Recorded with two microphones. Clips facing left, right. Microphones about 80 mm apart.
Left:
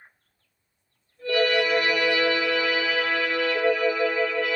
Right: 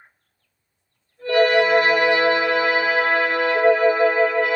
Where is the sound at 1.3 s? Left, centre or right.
Right.